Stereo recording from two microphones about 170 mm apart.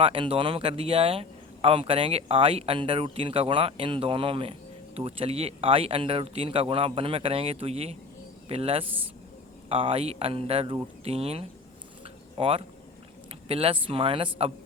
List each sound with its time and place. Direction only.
0.0 s speech: 30° right (ahead or behind)